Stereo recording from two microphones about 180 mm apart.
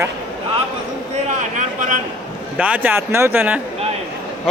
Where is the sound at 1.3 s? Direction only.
45° right (ahead or behind).